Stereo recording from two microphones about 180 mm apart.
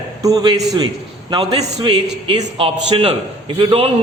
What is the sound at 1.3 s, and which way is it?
A man's voice, 35° right (ahead or behind).